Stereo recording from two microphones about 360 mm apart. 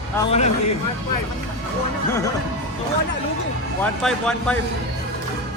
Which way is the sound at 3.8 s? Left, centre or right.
Centre.